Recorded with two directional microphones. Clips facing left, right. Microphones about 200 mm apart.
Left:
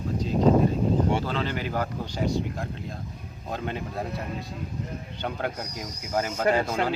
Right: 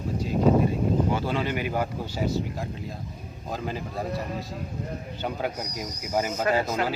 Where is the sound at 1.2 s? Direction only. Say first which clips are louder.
Right 2 dB; 10° right (ahead or behind).